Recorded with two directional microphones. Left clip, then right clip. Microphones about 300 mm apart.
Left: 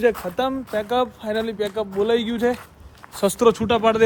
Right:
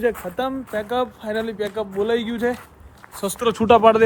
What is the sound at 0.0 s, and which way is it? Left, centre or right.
Speech, centre.